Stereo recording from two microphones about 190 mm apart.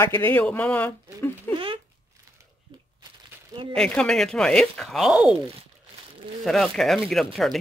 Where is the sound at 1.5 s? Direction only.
25° right (ahead or behind).